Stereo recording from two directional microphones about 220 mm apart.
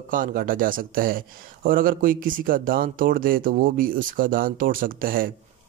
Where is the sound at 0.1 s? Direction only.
40° right (ahead or behind).